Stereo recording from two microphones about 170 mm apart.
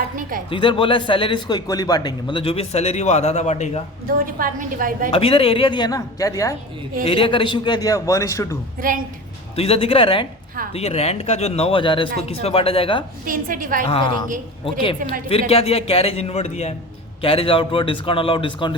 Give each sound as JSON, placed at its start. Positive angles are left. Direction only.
{"t": 0.2, "sound": "a sound", "side_deg": -55}
{"t": 0.5, "sound": "a man's voice", "side_deg": 30}
{"t": 4.0, "sound": "a woman's voice", "side_deg": -55}
{"t": 5.1, "sound": "a man's voice", "side_deg": 35}
{"t": 7.0, "sound": "a man's voice", "side_deg": 35}
{"t": 8.8, "sound": "a woman's voice", "side_deg": -55}
{"t": 9.6, "sound": "a man's voice", "side_deg": 35}
{"t": 13.2, "sound": "a woman's voice", "side_deg": -55}
{"t": 13.8, "sound": "a man's voice", "side_deg": 30}